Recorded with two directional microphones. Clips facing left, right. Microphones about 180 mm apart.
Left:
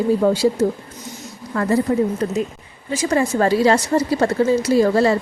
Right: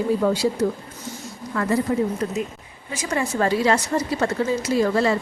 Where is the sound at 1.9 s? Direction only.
40° left (ahead or behind).